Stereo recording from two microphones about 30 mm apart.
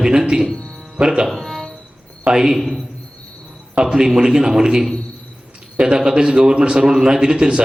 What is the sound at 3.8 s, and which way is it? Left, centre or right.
Speech, right.